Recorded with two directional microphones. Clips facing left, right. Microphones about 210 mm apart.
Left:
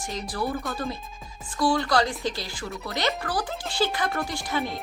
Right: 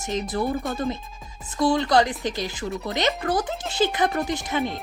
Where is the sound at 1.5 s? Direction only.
20° right (ahead or behind).